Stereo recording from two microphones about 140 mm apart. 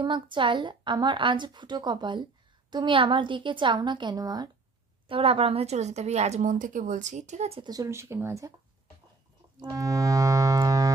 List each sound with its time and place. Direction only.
0.0 s a woman's voice: 35° right (ahead or behind)
5.0 s speech: 40° right (ahead or behind)
7.6 s music: 25° right (ahead or behind)
9.6 s music: 25° right (ahead or behind)